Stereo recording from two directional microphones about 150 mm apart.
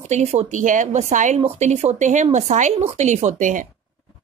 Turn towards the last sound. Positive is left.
turn(degrees=-55)  # may be behind; listen again after turning